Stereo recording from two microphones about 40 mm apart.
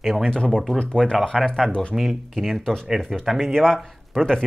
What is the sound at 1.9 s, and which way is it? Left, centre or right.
Speech, centre.